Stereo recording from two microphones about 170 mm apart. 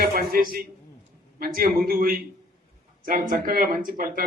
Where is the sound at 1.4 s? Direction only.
60° right (ahead or behind).